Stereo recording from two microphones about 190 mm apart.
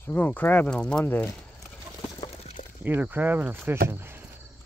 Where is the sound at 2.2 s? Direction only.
35° left (ahead or behind).